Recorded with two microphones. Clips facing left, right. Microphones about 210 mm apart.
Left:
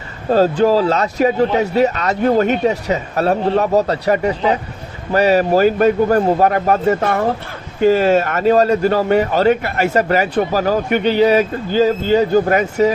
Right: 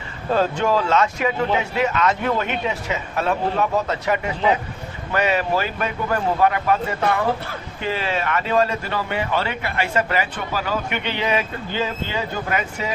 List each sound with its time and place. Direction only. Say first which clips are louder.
0.3 s a man's voice: left 7 dB; 35° left (ahead or behind)